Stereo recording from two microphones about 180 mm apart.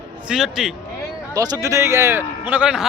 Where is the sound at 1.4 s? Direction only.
20° right (ahead or behind).